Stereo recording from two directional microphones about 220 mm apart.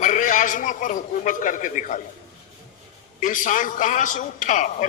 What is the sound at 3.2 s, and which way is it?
A man's voice, 35° left (ahead or behind).